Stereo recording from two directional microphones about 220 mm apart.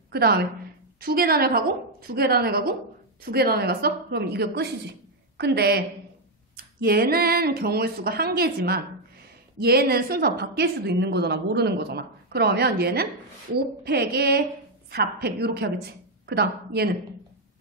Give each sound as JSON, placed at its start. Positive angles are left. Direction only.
{"t": 0.1, "sound": "a woman's voice", "side_deg": -45}